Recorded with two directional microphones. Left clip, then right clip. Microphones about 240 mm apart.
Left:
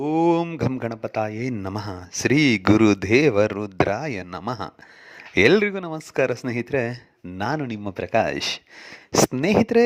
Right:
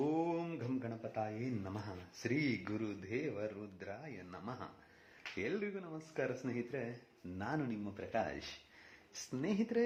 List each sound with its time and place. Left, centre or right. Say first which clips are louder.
0.0 s speech: left 17 dB; left